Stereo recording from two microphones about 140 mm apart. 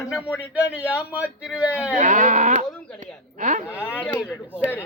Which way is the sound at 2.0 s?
60° right (ahead or behind).